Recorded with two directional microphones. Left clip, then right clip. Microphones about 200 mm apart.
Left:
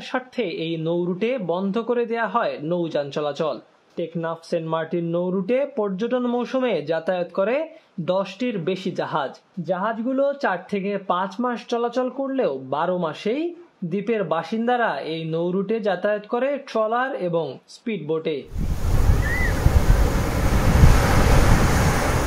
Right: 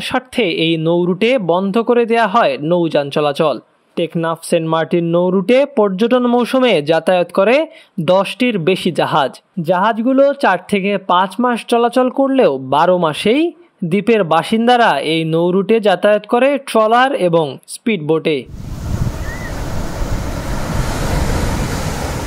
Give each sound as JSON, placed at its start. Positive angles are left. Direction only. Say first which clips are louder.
{"t": 0.0, "sound": "speech", "louder": "right 9 dB", "side_deg": -40}